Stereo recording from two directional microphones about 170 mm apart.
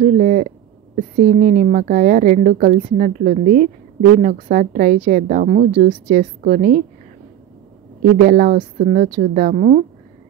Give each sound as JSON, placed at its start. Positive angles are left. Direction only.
{"t": 0.0, "sound": "a woman's voice", "side_deg": -50}
{"t": 8.2, "sound": "a woman's voice", "side_deg": -50}